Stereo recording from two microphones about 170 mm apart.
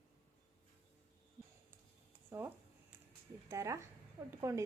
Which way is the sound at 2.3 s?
15° right (ahead or behind).